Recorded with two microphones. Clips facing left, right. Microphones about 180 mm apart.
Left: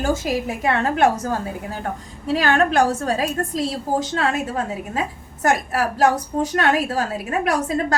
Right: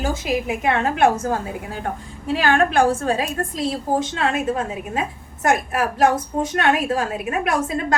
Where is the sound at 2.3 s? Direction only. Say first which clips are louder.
Even; 40° left (ahead or behind).